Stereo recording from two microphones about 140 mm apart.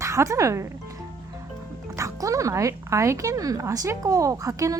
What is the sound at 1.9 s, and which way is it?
Speech, 20° right (ahead or behind).